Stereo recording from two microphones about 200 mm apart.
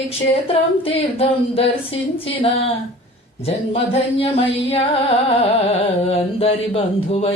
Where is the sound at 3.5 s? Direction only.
30° left (ahead or behind).